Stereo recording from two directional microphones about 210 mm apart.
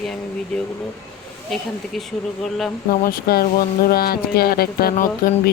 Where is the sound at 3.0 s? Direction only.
45° left (ahead or behind).